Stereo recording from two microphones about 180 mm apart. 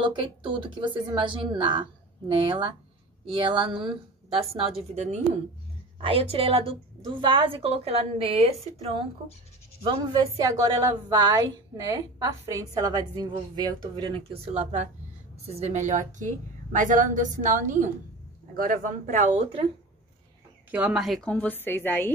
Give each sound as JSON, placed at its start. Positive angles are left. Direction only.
{"t": 0.0, "sound": "a woman's voice", "side_deg": -25}
{"t": 9.8, "sound": "a woman's voice", "side_deg": -25}
{"t": 20.7, "sound": "a woman's voice", "side_deg": -5}